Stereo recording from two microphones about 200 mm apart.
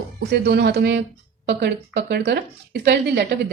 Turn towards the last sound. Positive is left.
turn(degrees=-55)  # may be behind; listen again after turning